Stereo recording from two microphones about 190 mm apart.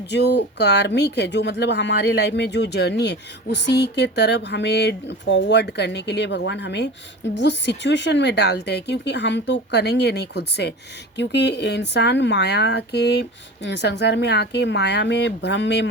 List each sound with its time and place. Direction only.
0.1 s speech: 65° left (ahead or behind)